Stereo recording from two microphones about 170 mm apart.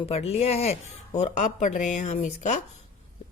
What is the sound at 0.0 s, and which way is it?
Speech, 35° left (ahead or behind).